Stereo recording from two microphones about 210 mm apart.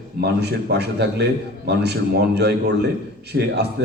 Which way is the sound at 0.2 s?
50° right (ahead or behind).